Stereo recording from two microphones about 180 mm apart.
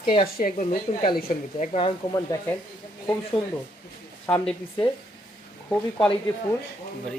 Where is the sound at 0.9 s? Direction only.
30° left (ahead or behind).